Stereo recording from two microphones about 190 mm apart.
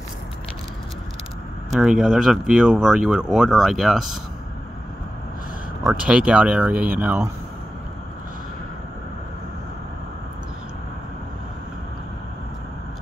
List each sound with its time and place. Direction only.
1.7 s speech: centre (ahead or behind)
5.9 s speech: 5° right (ahead or behind)